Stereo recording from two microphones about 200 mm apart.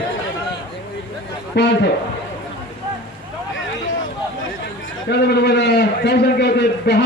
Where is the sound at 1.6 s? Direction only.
55° left (ahead or behind).